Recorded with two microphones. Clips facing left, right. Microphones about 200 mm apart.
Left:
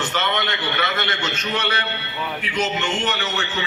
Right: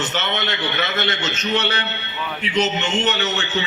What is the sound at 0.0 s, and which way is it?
A man's voice, 25° right (ahead or behind).